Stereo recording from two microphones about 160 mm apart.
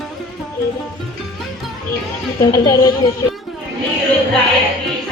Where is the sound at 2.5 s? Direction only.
20° left (ahead or behind).